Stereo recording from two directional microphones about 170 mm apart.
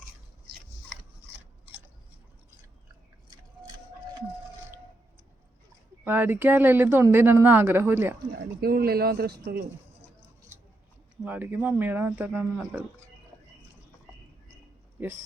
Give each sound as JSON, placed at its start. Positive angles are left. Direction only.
{"t": 6.1, "sound": "speech", "side_deg": -10}
{"t": 8.6, "sound": "speech", "side_deg": -65}
{"t": 11.2, "sound": "speech", "side_deg": -10}